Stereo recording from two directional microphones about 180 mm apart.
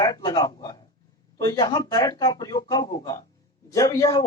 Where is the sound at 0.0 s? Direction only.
25° left (ahead or behind).